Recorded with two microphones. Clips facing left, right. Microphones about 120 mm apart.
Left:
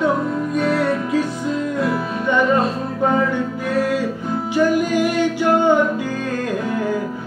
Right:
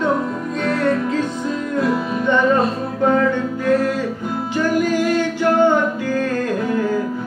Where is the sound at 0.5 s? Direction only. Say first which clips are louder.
Right 1 dB; 10° left (ahead or behind).